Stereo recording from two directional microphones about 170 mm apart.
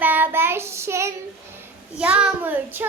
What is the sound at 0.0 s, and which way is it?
Child singing, 10° right (ahead or behind).